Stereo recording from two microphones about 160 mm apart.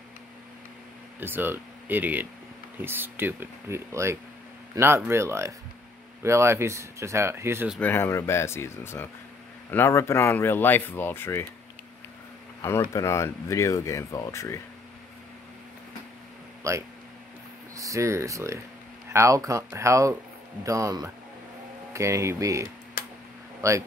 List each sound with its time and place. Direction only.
1.2 s speech: 15° right (ahead or behind)
7.8 s speech: 15° left (ahead or behind)
12.6 s speech: 15° left (ahead or behind)
17.7 s speech: 20° right (ahead or behind)